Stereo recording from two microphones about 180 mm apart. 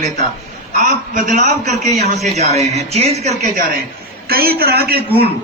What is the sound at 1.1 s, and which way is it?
A man's voice, 45° right (ahead or behind).